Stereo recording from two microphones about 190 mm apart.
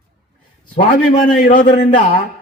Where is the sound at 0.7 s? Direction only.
45° left (ahead or behind).